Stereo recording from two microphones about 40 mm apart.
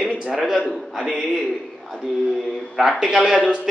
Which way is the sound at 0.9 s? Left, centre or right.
Centre.